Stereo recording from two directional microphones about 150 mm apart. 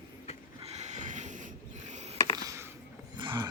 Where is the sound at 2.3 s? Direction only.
25° right (ahead or behind).